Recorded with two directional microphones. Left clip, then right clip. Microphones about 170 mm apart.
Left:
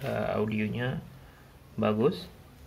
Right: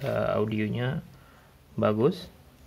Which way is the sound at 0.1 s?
65° right (ahead or behind).